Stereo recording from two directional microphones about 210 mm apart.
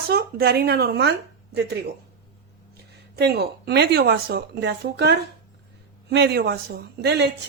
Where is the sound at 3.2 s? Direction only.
50° right (ahead or behind).